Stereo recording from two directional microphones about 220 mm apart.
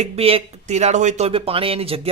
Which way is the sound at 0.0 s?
25° right (ahead or behind).